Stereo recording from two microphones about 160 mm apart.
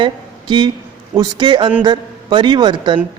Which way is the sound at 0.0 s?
30° right (ahead or behind).